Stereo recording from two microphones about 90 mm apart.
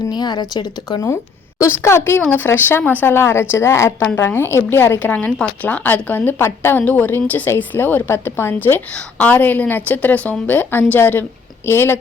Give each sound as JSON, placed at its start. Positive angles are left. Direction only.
{"t": 0.1, "sound": "a woman's voice", "side_deg": 50}
{"t": 1.6, "sound": "a woman's voice", "side_deg": 30}